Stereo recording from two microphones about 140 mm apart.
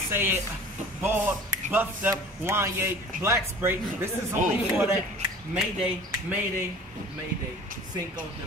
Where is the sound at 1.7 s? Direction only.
15° right (ahead or behind).